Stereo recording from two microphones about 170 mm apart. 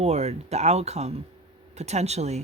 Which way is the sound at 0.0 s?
40° right (ahead or behind).